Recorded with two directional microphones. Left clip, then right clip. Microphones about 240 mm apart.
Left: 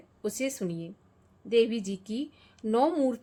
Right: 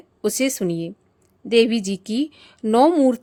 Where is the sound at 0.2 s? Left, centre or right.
Right.